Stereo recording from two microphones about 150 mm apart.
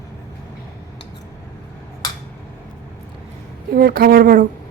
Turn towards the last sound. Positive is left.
turn(degrees=-80)